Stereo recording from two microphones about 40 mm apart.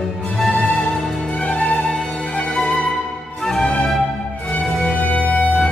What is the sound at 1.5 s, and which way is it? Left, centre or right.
Music, centre.